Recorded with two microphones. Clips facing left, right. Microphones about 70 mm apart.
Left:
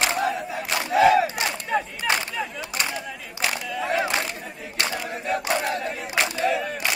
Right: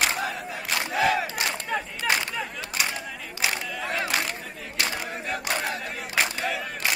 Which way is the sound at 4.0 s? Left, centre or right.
Centre.